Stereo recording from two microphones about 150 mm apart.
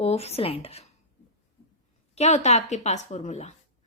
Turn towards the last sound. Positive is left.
turn(degrees=50)  # may be behind; listen again after turning